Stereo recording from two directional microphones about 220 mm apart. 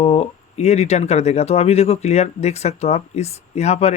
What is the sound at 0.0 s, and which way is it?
Speech, 25° left (ahead or behind).